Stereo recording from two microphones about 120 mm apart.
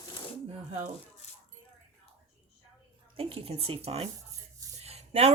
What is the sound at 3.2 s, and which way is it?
Speech, 55° right (ahead or behind).